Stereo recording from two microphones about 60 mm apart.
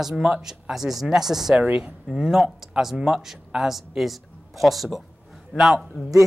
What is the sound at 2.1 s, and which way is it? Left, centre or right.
Speech, centre.